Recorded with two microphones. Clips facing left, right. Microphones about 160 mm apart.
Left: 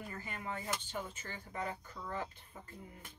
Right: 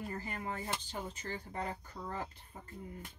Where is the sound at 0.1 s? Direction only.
35° right (ahead or behind).